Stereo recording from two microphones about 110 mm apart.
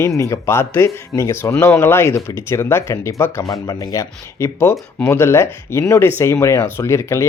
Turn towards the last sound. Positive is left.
turn(degrees=25)  # may be behind; listen again after turning